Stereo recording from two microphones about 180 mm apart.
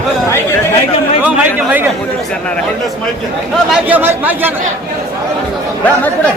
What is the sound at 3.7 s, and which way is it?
Speech, 10° right (ahead or behind).